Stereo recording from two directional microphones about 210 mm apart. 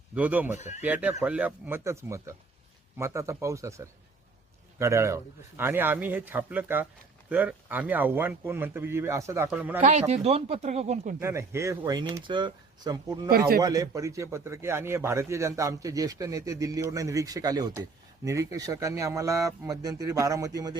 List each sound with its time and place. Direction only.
0.1 s a man's voice: 5° right (ahead or behind)
9.8 s speech: 35° right (ahead or behind)
11.2 s a man's voice: 15° right (ahead or behind)
13.3 s speech: 45° right (ahead or behind)
13.6 s a man's voice: 15° right (ahead or behind)